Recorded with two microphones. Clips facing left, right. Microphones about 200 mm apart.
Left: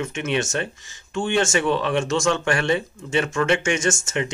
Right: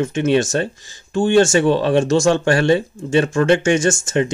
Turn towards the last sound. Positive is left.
turn(degrees=-35)  # may be behind; listen again after turning